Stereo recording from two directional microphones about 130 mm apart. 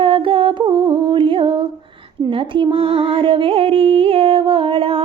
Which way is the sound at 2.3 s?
40° right (ahead or behind).